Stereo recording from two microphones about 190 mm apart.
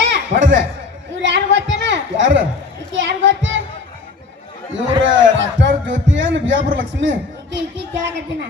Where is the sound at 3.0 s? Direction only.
75° right (ahead or behind).